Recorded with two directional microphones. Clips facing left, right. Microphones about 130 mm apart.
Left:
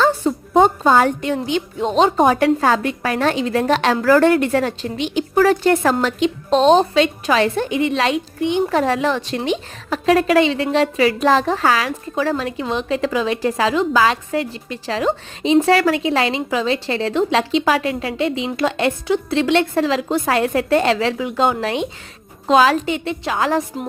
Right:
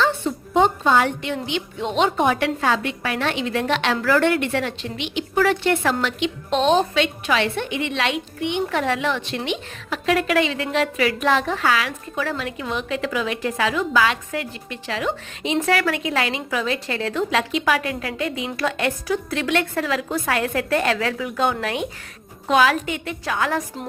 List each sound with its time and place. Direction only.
0.0 s a woman's voice: 40° left (ahead or behind)